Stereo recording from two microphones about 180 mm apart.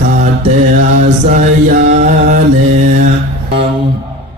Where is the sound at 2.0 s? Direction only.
45° right (ahead or behind).